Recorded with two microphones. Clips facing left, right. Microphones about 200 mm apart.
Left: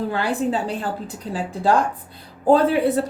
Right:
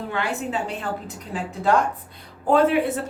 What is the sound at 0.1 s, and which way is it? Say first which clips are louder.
A woman's voice: left 4 dB; 35° left (ahead or behind).